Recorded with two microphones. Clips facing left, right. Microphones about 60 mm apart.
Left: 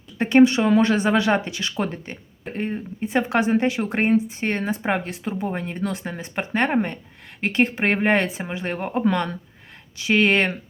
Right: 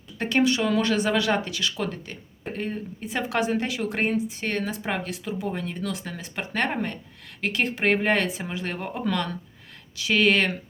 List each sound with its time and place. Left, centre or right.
0.2 s speech: left